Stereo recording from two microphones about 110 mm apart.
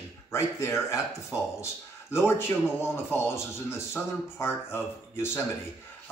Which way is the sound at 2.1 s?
25° left (ahead or behind).